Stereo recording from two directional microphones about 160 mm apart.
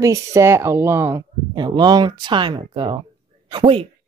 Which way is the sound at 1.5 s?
25° right (ahead or behind).